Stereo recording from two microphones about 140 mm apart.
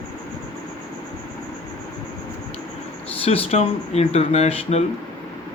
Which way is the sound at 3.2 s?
45° left (ahead or behind).